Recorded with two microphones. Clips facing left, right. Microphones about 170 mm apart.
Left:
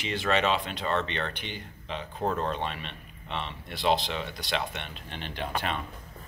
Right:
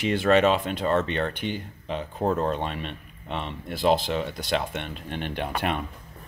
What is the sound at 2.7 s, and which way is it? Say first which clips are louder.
Speech: right 6 dB; 45° right (ahead or behind).